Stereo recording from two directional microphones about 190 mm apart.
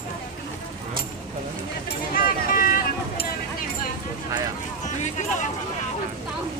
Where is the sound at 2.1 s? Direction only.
45° left (ahead or behind).